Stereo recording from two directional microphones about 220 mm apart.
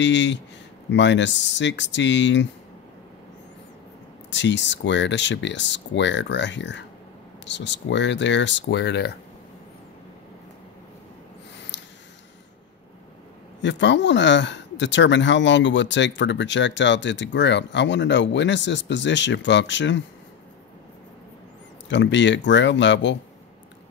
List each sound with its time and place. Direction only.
0.0 s speech: 55° left (ahead or behind)
4.3 s speech: 55° left (ahead or behind)
13.6 s speech: 55° left (ahead or behind)
21.8 s speech: 55° left (ahead or behind)